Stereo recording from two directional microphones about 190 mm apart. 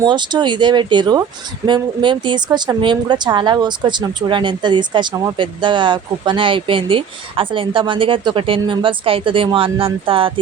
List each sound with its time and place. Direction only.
0.0 s speech: 25° right (ahead or behind)